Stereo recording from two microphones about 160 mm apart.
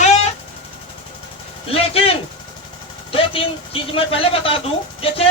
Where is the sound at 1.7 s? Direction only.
35° left (ahead or behind).